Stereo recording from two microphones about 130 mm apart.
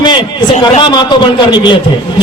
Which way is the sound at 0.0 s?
35° left (ahead or behind).